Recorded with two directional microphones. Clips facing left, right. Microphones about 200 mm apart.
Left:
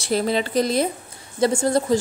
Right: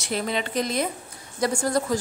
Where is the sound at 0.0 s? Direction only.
35° left (ahead or behind).